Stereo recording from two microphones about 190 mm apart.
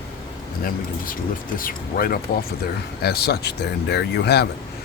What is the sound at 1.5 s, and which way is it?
Speech, 50° left (ahead or behind).